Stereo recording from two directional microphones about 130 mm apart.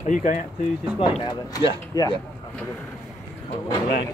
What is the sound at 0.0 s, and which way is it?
Speech, 75° left (ahead or behind).